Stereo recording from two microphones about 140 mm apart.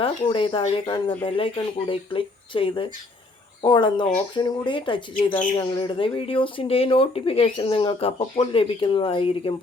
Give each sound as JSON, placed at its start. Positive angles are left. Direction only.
{"t": 0.0, "sound": "speech", "side_deg": 35}